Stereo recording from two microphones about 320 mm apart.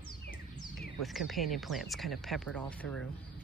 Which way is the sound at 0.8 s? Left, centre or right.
Centre.